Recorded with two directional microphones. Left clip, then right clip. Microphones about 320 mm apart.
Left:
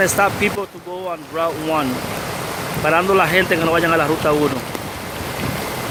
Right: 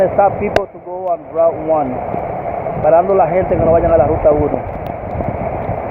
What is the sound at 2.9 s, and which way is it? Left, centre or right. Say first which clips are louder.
Speech: right 4 dB; left.